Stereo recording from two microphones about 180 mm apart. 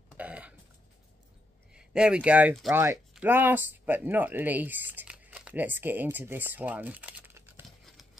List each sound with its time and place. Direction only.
0.2 s burping: 5° right (ahead or behind)
1.7 s speech: 5° right (ahead or behind)